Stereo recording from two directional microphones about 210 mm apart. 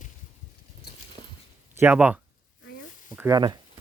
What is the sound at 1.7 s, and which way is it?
Speech, 10° right (ahead or behind).